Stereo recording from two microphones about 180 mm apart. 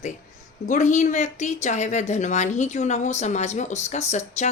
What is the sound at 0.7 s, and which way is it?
Speech, 45° left (ahead or behind).